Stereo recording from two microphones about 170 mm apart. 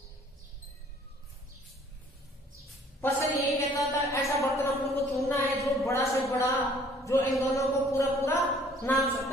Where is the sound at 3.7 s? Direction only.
15° left (ahead or behind).